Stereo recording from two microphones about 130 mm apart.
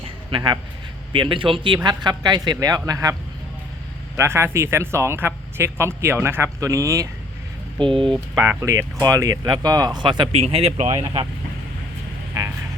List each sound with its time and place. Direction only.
0.0 s a sound: 40° right (ahead or behind)
1.1 s speech: 40° right (ahead or behind)
4.2 s speech: 20° right (ahead or behind)
7.8 s speech: 40° right (ahead or behind)
8.4 s speech: 20° right (ahead or behind); by 10.4 s 35° right (ahead or behind)
10.4 s speech: 55° right (ahead or behind)
11.0 s speech: 40° right (ahead or behind)